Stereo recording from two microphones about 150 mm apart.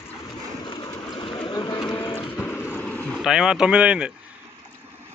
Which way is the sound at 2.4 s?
15° left (ahead or behind).